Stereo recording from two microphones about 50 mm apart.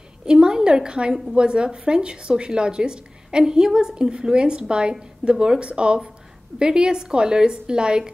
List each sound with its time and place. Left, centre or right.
0.3 s a woman's voice: centre